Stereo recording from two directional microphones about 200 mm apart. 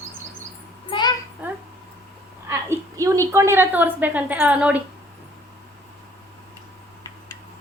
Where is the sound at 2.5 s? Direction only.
15° right (ahead or behind).